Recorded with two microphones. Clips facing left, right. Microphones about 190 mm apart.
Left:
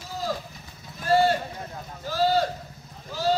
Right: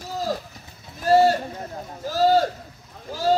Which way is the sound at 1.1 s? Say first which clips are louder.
Right 4 dB; 40° right (ahead or behind).